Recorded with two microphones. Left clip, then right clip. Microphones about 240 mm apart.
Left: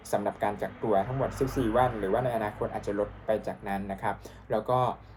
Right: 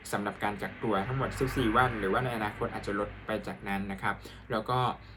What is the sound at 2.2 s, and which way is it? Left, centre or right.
Speech, right.